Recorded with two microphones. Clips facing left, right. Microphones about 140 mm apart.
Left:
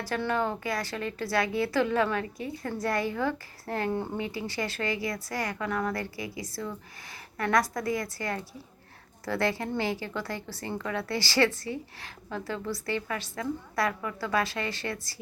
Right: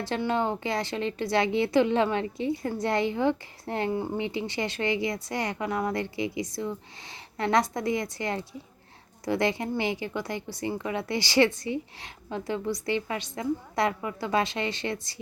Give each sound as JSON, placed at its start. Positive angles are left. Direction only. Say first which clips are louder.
{"t": 0.0, "sound": "speech", "louder": "right 2 dB", "side_deg": -20}